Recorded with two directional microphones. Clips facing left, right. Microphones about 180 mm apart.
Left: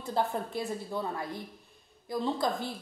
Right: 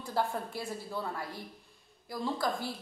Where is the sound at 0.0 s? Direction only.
20° left (ahead or behind).